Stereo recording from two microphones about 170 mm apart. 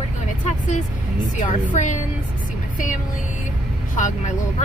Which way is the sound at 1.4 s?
45° left (ahead or behind).